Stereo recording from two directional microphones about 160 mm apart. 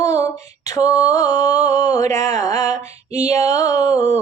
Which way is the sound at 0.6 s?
20° left (ahead or behind).